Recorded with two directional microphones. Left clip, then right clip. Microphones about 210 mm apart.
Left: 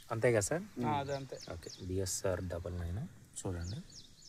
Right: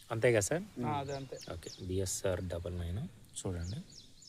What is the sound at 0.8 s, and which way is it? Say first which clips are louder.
Speech: left 1 dB; 45° left (ahead or behind).